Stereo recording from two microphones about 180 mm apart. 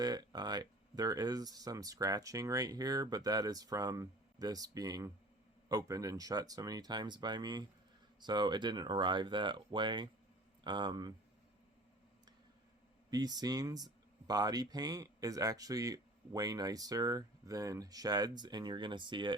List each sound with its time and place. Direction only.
0.0 s speech: 20° right (ahead or behind)
13.1 s speech: 20° right (ahead or behind)